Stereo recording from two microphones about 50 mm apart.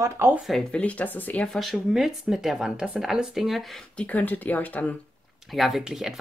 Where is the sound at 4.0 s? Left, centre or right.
Left.